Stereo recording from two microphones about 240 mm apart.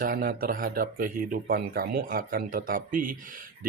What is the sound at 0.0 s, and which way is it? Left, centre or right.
Speech, right.